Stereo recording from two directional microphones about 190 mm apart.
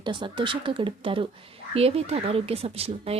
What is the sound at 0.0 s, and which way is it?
Speech, 25° right (ahead or behind).